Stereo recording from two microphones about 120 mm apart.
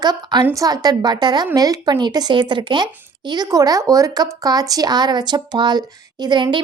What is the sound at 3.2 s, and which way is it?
Speech, 35° right (ahead or behind).